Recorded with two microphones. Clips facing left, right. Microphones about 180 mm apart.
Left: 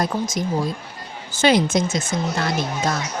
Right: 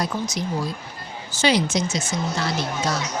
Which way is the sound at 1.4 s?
50° left (ahead or behind).